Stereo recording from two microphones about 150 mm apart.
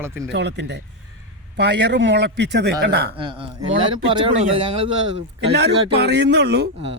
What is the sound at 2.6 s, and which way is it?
Speech, 90° right.